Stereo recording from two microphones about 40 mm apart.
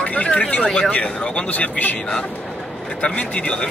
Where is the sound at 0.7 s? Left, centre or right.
Left.